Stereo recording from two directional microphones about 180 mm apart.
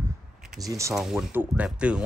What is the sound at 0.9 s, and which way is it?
Speech, 5° right (ahead or behind).